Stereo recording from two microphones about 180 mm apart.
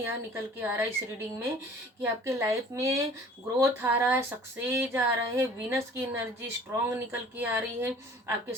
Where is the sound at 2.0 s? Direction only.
15° right (ahead or behind).